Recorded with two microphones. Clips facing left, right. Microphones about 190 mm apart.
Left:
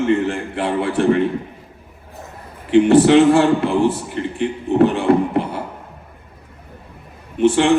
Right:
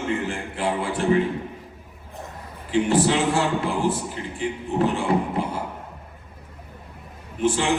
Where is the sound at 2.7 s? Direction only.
65° left (ahead or behind).